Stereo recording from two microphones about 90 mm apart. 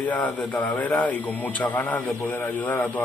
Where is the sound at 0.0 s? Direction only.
20° left (ahead or behind).